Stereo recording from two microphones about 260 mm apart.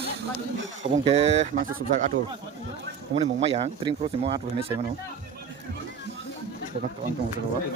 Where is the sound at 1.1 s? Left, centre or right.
Right.